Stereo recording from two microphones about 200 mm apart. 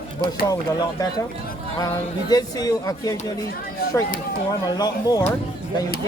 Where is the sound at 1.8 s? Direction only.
15° left (ahead or behind).